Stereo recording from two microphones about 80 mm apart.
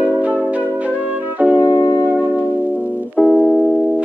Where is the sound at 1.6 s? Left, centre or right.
Left.